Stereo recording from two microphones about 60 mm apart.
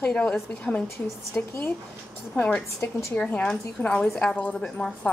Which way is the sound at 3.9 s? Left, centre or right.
Centre.